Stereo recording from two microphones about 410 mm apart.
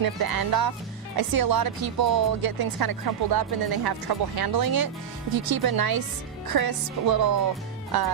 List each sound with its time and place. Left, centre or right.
0.0 s speech: right